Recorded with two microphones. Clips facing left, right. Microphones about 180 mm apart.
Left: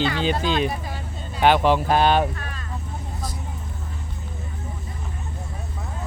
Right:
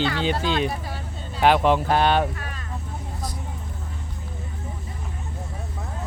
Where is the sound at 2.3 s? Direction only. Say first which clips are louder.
Left 1 dB; 15° right (ahead or behind).